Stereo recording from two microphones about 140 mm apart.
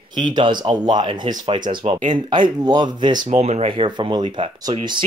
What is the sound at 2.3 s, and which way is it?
Speech, 30° right (ahead or behind).